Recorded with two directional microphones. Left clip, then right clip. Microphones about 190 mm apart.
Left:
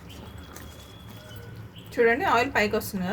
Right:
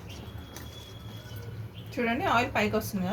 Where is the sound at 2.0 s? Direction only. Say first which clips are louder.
Left 5 dB; 40° left (ahead or behind).